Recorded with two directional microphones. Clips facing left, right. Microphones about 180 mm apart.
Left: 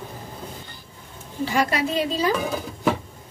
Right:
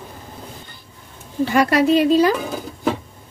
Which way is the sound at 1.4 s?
65° right (ahead or behind).